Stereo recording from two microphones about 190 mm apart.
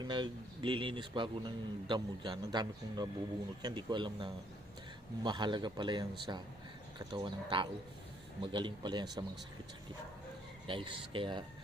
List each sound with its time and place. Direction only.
0.0 s speech: 25° right (ahead or behind)
10.7 s speech: 25° right (ahead or behind)